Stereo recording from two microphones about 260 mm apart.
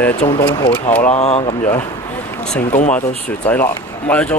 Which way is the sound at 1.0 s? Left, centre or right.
Left.